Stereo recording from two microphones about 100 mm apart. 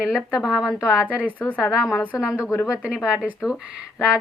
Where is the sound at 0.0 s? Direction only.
5° right (ahead or behind).